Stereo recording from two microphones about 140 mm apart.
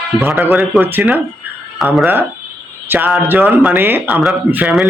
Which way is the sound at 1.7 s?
Centre (ahead or behind).